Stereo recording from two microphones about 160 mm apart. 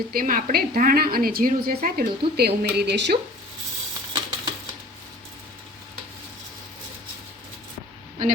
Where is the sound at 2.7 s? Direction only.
90° right.